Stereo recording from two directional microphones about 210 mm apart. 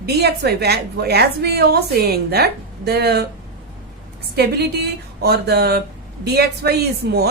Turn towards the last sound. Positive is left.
turn(degrees=-50)  # may be behind; listen again after turning